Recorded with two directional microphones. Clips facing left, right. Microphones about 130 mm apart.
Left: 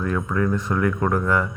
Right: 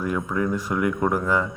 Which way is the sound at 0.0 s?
10° right (ahead or behind).